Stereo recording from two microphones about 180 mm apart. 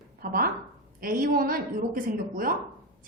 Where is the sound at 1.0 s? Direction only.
50° right (ahead or behind).